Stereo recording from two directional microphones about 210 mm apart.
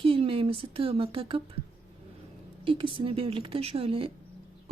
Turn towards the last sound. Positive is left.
turn(degrees=-25)  # may be behind; listen again after turning